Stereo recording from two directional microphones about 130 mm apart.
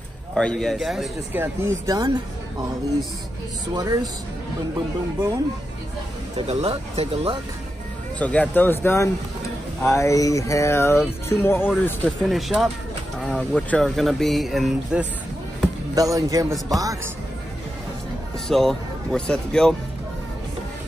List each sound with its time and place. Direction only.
0.3 s speech: 5° left (ahead or behind)
1.3 s speech: 20° right (ahead or behind)
3.7 s speech: 30° right (ahead or behind)
6.3 s speech: 55° right (ahead or behind)
8.2 s speech: 10° left (ahead or behind)
12.3 s speech: centre (ahead or behind)
15.9 s speech: 25° right (ahead or behind)
18.5 s speech: centre (ahead or behind)